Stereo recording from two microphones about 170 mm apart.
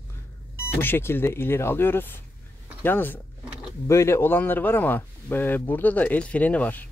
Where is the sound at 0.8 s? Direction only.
10° left (ahead or behind).